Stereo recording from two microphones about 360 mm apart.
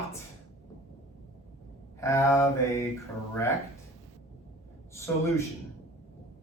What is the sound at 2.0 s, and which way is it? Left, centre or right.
Speech, centre.